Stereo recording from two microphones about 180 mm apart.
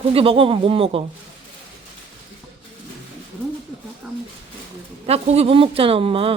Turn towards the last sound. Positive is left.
turn(degrees=-30)  # may be behind; listen again after turning